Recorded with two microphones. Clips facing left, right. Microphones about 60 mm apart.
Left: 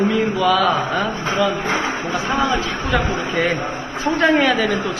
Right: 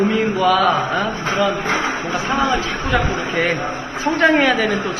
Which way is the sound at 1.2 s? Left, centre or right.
Right.